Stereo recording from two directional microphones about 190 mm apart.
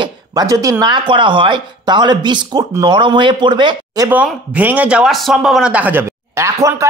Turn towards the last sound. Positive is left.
turn(degrees=-15)  # may be behind; listen again after turning